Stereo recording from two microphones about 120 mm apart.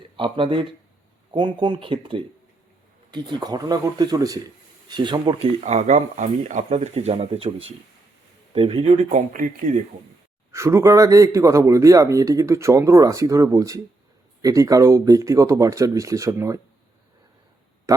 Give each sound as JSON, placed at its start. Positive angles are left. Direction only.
{"t": 0.2, "sound": "speech", "side_deg": -45}
{"t": 3.1, "sound": "speech", "side_deg": -35}
{"t": 5.5, "sound": "speech", "side_deg": -65}
{"t": 10.5, "sound": "speech", "side_deg": -25}
{"t": 17.9, "sound": "speech", "side_deg": -25}